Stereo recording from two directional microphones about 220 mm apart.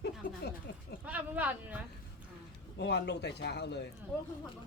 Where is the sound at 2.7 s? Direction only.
50° left (ahead or behind).